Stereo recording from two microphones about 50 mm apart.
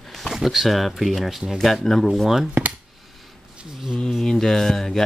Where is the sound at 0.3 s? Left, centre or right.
Centre.